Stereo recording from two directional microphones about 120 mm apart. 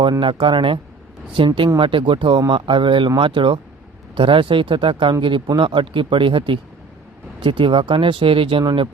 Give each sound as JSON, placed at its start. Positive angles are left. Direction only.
{"t": 0.2, "sound": "speech", "side_deg": -45}